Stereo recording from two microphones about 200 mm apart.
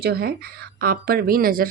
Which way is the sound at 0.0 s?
50° right (ahead or behind).